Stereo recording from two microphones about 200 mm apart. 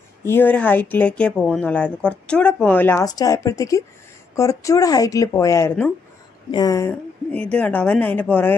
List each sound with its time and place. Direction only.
0.2 s speech: 10° left (ahead or behind)